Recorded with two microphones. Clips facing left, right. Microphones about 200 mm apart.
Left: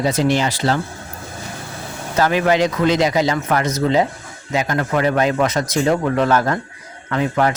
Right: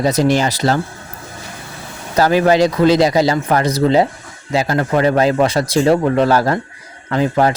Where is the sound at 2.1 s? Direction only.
35° right (ahead or behind).